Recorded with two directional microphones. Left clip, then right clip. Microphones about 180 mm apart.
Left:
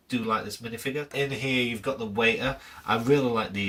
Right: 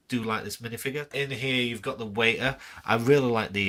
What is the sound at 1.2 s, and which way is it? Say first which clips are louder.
Speech: left 1 dB; 5° right (ahead or behind).